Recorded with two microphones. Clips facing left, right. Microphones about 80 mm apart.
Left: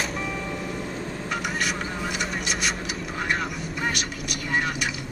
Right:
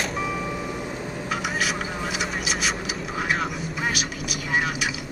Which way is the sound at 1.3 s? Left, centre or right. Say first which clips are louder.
Right 2 dB; centre.